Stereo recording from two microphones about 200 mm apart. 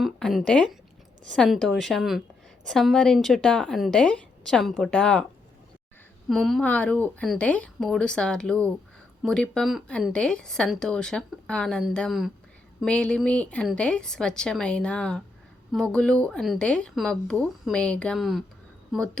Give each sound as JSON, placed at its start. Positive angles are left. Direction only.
{"t": 0.0, "sound": "speech", "side_deg": 0}
{"t": 6.2, "sound": "speech", "side_deg": 0}